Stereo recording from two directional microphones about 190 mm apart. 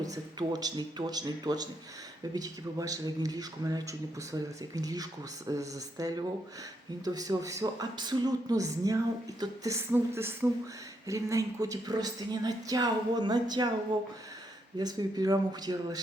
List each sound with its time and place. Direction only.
0.0 s a woman's voice: 20° right (ahead or behind)
14.8 s a woman's voice: 20° right (ahead or behind)